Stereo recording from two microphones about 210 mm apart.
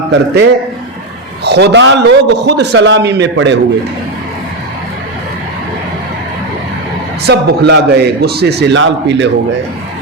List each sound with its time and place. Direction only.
0.1 s a man's voice: 55° right (ahead or behind)
7.3 s a man's voice: 50° right (ahead or behind)